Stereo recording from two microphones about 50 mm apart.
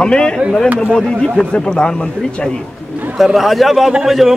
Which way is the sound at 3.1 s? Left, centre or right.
Centre.